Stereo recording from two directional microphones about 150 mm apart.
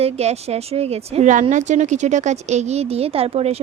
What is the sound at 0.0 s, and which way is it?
A woman's voice, 45° right (ahead or behind).